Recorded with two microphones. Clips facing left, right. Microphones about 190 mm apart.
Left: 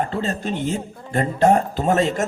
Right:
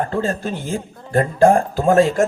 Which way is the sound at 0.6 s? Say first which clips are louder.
Left 1 dB; 25° left (ahead or behind).